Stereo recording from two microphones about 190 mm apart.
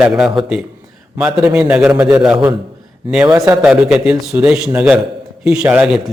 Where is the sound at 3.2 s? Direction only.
20° right (ahead or behind).